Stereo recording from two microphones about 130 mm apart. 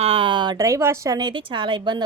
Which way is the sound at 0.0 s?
45° right (ahead or behind).